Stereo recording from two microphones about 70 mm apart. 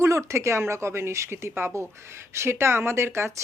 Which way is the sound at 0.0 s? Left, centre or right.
Right.